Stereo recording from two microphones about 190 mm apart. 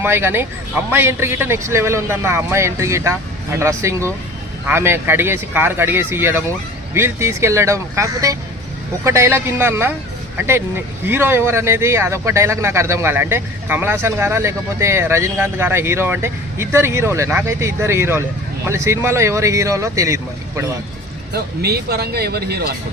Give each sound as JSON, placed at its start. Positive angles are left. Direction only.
{"t": 0.0, "sound": "speech", "side_deg": -10}
{"t": 21.3, "sound": "speech", "side_deg": -55}